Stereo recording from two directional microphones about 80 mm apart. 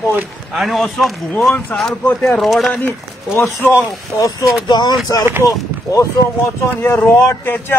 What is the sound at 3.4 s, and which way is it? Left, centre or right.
Speech, left.